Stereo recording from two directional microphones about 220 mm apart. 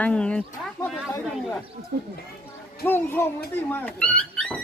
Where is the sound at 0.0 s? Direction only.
5° left (ahead or behind).